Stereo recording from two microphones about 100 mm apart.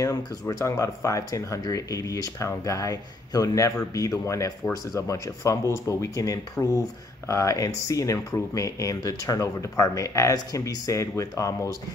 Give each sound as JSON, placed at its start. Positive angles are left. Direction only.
{"t": 0.0, "sound": "speech", "side_deg": 30}